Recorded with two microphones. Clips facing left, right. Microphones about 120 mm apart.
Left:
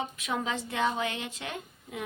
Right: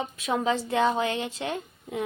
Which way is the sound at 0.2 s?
30° right (ahead or behind).